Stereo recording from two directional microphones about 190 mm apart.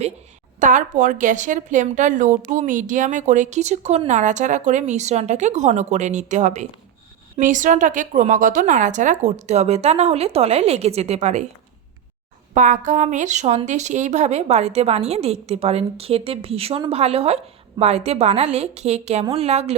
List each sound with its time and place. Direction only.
0.6 s speech: 45° right (ahead or behind)
12.5 s speech: 40° right (ahead or behind)